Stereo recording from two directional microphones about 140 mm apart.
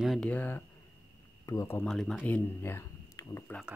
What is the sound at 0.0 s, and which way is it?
Speech, centre (ahead or behind).